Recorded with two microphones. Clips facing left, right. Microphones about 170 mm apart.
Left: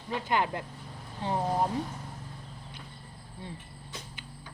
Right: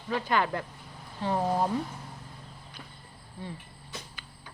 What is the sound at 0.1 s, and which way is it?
Speech, 20° left (ahead or behind).